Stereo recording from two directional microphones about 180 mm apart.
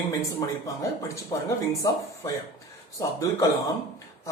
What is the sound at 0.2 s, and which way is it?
Speech, 15° left (ahead or behind).